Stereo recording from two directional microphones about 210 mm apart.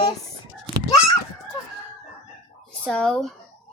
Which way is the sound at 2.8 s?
5° left (ahead or behind).